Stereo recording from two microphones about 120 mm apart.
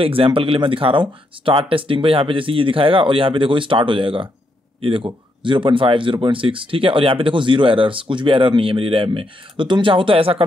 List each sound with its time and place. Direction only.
0.0 s speech: 50° right (ahead or behind)